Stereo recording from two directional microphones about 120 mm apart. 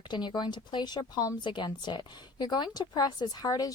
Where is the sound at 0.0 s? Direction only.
40° left (ahead or behind).